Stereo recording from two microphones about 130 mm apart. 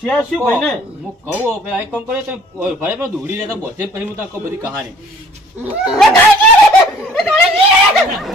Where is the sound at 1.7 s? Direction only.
15° right (ahead or behind).